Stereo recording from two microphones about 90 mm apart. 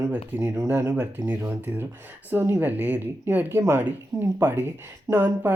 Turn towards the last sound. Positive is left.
turn(degrees=-20)  # may be behind; listen again after turning